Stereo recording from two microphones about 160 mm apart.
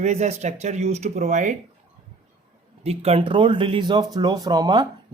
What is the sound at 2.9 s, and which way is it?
Speech, 40° right (ahead or behind).